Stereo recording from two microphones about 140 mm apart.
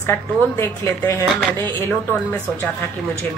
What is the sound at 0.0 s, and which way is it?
A woman's voice, 15° left (ahead or behind).